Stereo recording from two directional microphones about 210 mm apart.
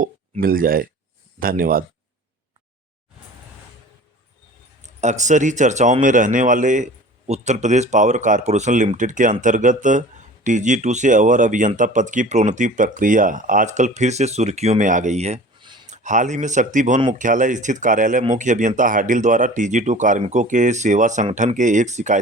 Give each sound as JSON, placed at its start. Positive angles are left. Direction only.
{"t": 0.0, "sound": "speech", "side_deg": -40}
{"t": 4.8, "sound": "speech", "side_deg": -35}